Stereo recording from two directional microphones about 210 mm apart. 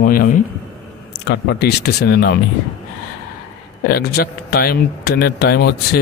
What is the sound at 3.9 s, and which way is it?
Speech, 50° left (ahead or behind).